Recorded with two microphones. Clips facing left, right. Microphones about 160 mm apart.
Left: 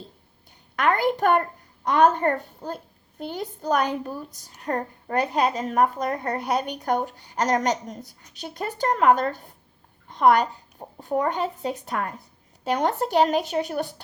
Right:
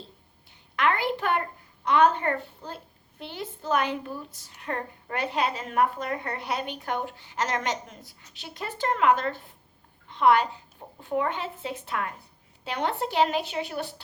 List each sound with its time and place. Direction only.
0.8 s a child's voice: 45° left (ahead or behind)